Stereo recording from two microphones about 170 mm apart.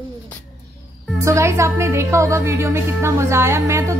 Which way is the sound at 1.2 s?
15° right (ahead or behind).